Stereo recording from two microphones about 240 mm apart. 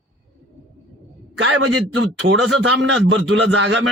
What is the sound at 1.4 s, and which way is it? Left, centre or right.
Speech, right.